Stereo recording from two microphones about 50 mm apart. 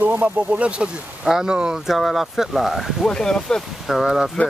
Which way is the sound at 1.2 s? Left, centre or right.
Centre.